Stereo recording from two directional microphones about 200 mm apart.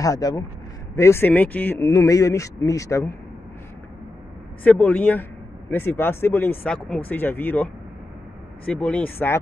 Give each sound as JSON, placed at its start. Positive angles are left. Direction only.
{"t": 0.0, "sound": "speech", "side_deg": 15}
{"t": 4.6, "sound": "speech", "side_deg": 5}